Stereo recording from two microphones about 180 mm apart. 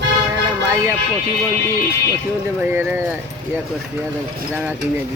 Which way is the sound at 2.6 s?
10° right (ahead or behind).